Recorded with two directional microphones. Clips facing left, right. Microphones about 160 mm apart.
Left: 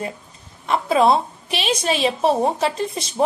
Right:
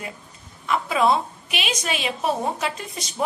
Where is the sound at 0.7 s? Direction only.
35° left (ahead or behind).